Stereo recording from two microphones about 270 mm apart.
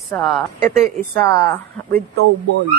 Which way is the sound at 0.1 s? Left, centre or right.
Centre.